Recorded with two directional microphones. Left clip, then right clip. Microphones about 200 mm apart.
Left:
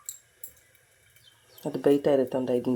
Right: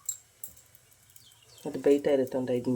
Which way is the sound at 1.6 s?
10° left (ahead or behind).